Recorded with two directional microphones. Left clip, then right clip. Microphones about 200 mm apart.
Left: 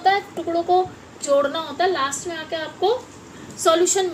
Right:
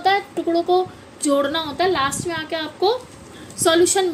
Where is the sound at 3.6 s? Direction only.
45° right (ahead or behind).